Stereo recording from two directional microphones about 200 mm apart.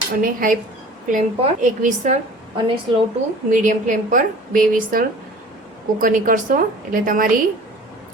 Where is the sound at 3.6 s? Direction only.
40° right (ahead or behind).